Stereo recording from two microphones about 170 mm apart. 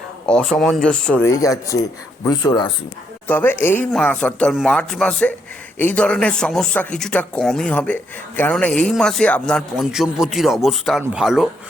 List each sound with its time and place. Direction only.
0.3 s a man's voice: 5° left (ahead or behind)
1.3 s speech: 20° left (ahead or behind)
3.2 s a man's voice: 10° left (ahead or behind)